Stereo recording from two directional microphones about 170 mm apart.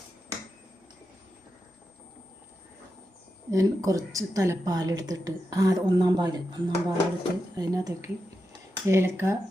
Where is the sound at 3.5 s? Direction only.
20° right (ahead or behind).